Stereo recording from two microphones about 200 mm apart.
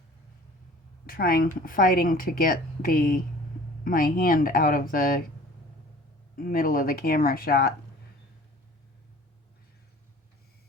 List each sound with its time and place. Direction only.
1.0 s speech: 50° left (ahead or behind)
6.3 s speech: 45° left (ahead or behind)